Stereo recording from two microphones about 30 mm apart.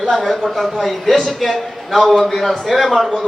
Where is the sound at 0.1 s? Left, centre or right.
Centre.